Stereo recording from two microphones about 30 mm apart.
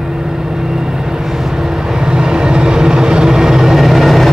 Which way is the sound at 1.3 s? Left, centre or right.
Centre.